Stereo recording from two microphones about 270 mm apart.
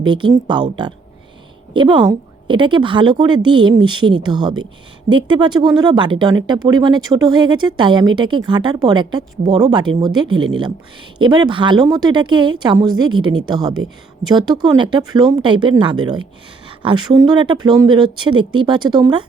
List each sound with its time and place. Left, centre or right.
0.0 s speech: centre